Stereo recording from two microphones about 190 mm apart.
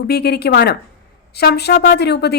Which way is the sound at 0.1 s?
55° left (ahead or behind).